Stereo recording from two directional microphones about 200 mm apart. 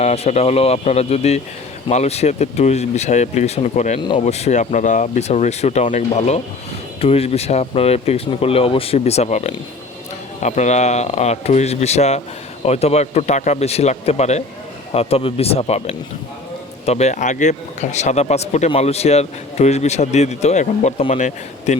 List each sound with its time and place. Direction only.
0.0 s speech: 35° left (ahead or behind)